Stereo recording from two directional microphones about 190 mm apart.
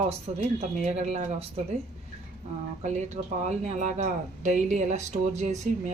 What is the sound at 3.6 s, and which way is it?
Speech, 40° right (ahead or behind).